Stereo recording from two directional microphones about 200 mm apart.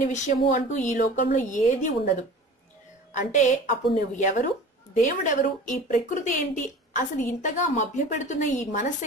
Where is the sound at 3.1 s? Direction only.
35° left (ahead or behind).